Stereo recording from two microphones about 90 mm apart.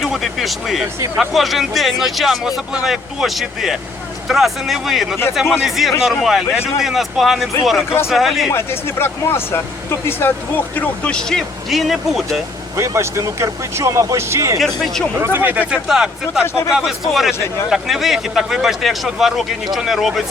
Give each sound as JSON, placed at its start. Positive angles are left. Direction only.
{"t": 0.0, "sound": "speech", "side_deg": 0}
{"t": 8.5, "sound": "speech", "side_deg": 25}
{"t": 10.8, "sound": "speech", "side_deg": 10}
{"t": 12.7, "sound": "speech", "side_deg": -35}
{"t": 14.6, "sound": "speech", "side_deg": 0}
{"t": 15.2, "sound": "speech", "side_deg": -25}
{"t": 15.9, "sound": "speech", "side_deg": -5}